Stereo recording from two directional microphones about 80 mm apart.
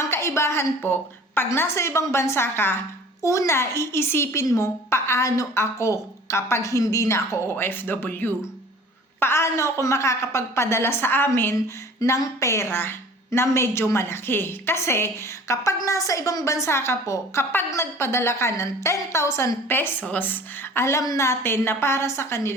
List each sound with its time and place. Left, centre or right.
0.0 s a sound: left
1.4 s speech: left
7.5 s speech: left
11.5 s speech: left
15.8 s speech: left